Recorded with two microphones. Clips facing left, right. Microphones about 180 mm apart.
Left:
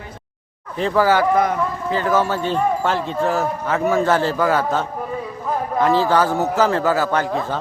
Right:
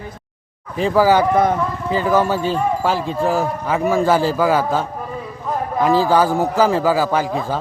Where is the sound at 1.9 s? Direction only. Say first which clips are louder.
Right 3 dB; 15° right (ahead or behind).